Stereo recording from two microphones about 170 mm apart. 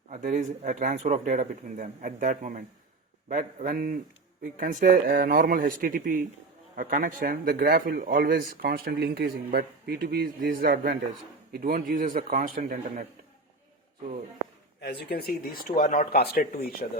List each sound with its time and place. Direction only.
0.1 s speech: 50° right (ahead or behind)
14.8 s speech: 70° left (ahead or behind)